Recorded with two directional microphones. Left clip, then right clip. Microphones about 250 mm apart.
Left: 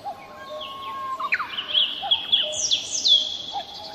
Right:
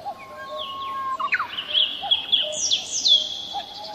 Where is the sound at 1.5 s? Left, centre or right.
Centre.